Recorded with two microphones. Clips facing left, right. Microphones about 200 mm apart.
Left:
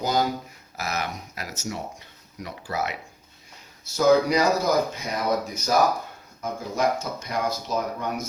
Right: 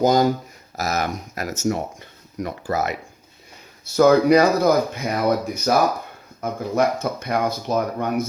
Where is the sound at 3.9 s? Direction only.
60° right (ahead or behind).